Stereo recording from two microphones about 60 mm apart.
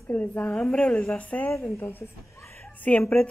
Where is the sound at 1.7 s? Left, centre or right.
Left.